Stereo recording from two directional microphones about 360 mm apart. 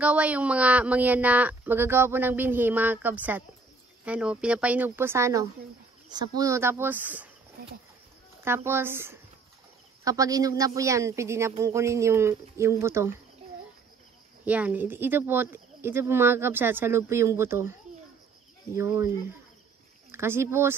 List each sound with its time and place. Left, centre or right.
0.0 s speech: centre
7.6 s speech: right
8.5 s speech: centre
14.4 s speech: centre
18.8 s speech: centre